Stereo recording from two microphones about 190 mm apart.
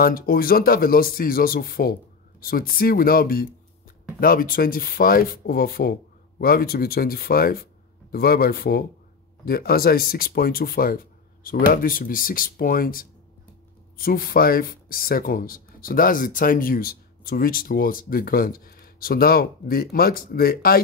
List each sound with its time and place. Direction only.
0.0 s speech: 50° left (ahead or behind)